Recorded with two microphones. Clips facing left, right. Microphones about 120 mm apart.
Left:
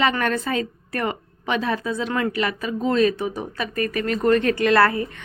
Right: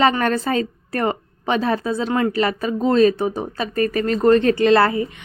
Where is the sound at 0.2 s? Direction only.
35° right (ahead or behind).